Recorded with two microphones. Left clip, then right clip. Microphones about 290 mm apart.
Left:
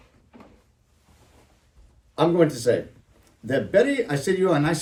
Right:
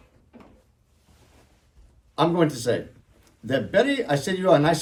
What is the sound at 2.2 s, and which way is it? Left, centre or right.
Speech, centre.